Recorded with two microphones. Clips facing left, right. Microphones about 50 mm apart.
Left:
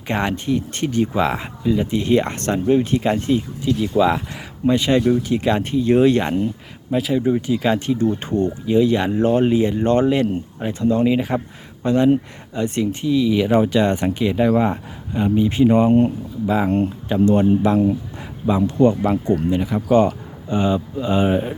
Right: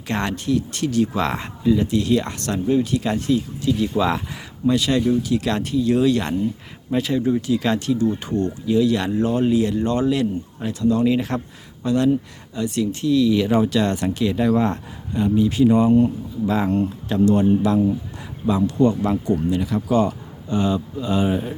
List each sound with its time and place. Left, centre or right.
0.1 s speech: centre
1.2 s speech: centre
1.9 s speech: left
3.7 s speech: centre
4.6 s speech: left
6.9 s speech: centre
7.2 s speech: centre
7.9 s speech: left
9.8 s speech: left
11.1 s speech: centre
11.8 s speech: left
19.5 s speech: left